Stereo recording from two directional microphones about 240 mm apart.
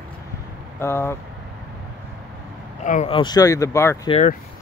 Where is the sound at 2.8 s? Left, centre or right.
Left; by 4.1 s centre.